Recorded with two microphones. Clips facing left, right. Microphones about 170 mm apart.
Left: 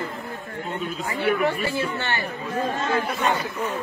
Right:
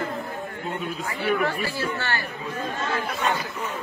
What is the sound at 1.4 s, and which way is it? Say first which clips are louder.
Speech: left 3 dB; 20° left (ahead or behind).